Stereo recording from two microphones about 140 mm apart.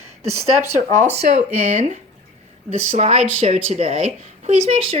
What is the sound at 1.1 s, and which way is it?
A woman's voice, 50° right (ahead or behind).